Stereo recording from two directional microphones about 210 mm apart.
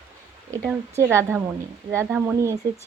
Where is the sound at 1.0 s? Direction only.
10° right (ahead or behind).